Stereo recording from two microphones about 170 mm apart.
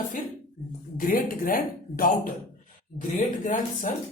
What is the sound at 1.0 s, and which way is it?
Speech, 55° left (ahead or behind).